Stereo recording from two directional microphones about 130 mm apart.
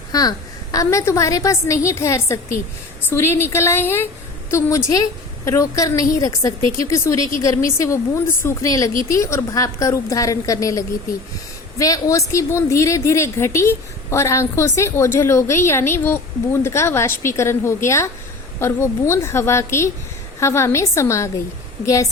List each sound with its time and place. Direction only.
0.1 s a woman's voice: 30° left (ahead or behind)
5.5 s a woman's voice: 25° left (ahead or behind)